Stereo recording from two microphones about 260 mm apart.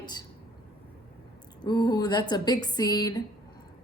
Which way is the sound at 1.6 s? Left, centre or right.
Centre.